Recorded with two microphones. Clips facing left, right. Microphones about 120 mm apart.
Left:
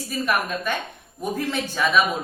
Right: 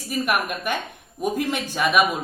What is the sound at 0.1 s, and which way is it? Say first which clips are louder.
A woman's voice: right 1 dB; 15° right (ahead or behind).